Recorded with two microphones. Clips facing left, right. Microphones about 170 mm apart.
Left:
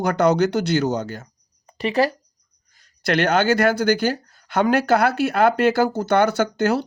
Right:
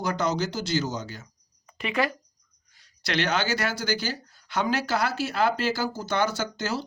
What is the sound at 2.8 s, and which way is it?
Speech, 55° left (ahead or behind).